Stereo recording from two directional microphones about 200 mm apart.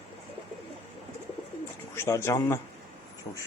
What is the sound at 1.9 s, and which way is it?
Speech, 15° left (ahead or behind).